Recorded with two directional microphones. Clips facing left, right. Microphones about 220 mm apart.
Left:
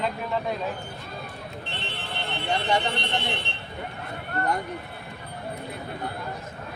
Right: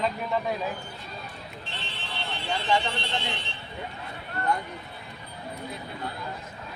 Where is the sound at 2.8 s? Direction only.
60° left (ahead or behind).